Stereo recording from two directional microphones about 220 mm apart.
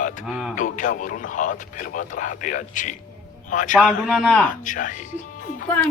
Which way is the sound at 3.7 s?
Centre (ahead or behind).